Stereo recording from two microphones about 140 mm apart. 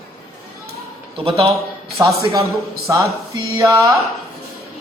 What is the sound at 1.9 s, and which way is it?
A man's voice, 25° right (ahead or behind).